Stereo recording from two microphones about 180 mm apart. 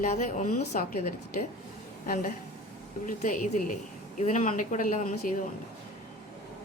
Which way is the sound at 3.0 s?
45° left (ahead or behind).